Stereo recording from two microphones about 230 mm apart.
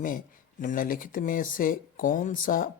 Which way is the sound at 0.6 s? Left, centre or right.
Left.